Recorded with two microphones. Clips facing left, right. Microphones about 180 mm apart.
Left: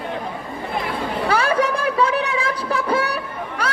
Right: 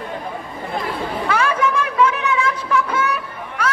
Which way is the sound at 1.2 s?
35° left (ahead or behind).